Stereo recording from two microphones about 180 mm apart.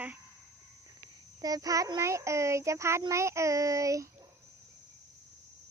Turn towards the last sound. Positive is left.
turn(degrees=-20)  # may be behind; listen again after turning